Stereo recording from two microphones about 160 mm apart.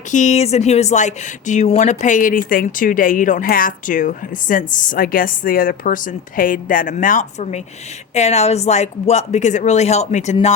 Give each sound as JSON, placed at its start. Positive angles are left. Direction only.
{"t": 0.1, "sound": "speech", "side_deg": 50}